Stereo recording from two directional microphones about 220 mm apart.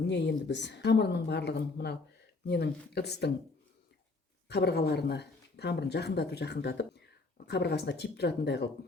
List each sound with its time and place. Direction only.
0.1 s speech: 50° left (ahead or behind)
4.4 s speech: 50° left (ahead or behind)